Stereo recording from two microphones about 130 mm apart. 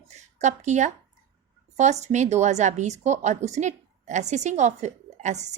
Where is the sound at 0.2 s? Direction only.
65° right (ahead or behind).